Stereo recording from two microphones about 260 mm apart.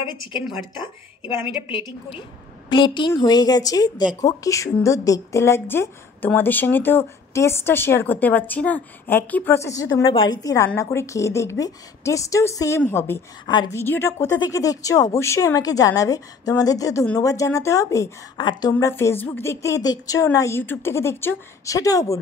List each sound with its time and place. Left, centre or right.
1.7 s a woman's voice: centre